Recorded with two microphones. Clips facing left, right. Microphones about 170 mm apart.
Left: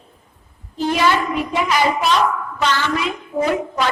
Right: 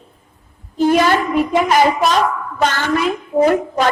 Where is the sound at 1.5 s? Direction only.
45° right (ahead or behind).